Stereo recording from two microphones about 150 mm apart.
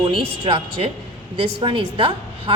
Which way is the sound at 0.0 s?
30° right (ahead or behind).